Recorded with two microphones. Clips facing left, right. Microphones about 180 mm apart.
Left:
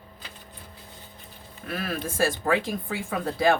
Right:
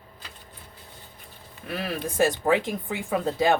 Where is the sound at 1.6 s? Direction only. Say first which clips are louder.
Right 1 dB; 20° right (ahead or behind).